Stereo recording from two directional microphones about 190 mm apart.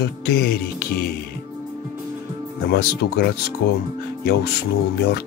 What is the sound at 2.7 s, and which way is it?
Speech, 55° left (ahead or behind).